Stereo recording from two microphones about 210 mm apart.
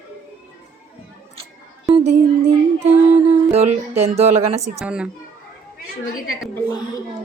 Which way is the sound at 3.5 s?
30° right (ahead or behind).